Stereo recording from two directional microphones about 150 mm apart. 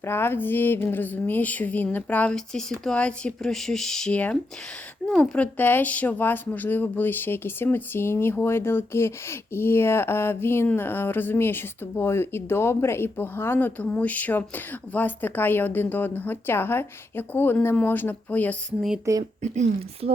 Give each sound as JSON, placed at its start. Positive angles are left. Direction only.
{"t": 0.0, "sound": "speech", "side_deg": 15}
{"t": 19.1, "sound": "speech", "side_deg": -20}
{"t": 19.4, "sound": "speech", "side_deg": -50}